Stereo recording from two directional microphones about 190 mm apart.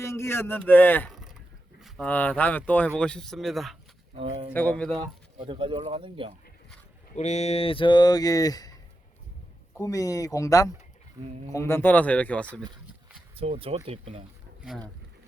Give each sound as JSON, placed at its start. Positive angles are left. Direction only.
{"t": 0.0, "sound": "speech", "side_deg": 15}
{"t": 1.1, "sound": "vehicle", "side_deg": 0}
{"t": 1.8, "sound": "speech", "side_deg": 5}
{"t": 4.1, "sound": "speech", "side_deg": -30}
{"t": 4.5, "sound": "speech", "side_deg": 10}
{"t": 5.4, "sound": "speech", "side_deg": -25}
{"t": 7.2, "sound": "speech", "side_deg": 35}
{"t": 9.7, "sound": "speech", "side_deg": 15}
{"t": 13.3, "sound": "speech", "side_deg": -30}
{"t": 14.6, "sound": "speech", "side_deg": 0}